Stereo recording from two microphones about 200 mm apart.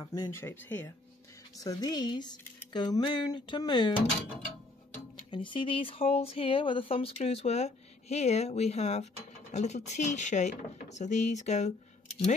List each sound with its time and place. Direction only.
0.0 s speech: 15° left (ahead or behind)
5.3 s speech: 25° left (ahead or behind)